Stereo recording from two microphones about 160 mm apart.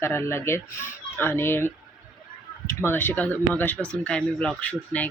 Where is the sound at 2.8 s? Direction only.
15° left (ahead or behind).